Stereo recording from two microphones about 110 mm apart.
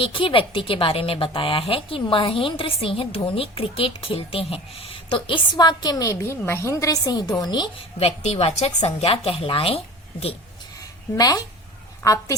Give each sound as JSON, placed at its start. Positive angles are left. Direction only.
{"t": 0.0, "sound": "a woman's voice", "side_deg": 55}
{"t": 7.8, "sound": "a woman's voice", "side_deg": 70}
{"t": 11.2, "sound": "speech", "side_deg": 35}